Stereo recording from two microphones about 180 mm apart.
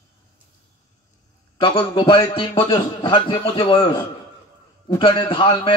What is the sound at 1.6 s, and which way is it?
A man's voice, 30° left (ahead or behind).